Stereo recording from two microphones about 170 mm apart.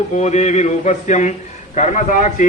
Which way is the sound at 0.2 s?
40° left (ahead or behind).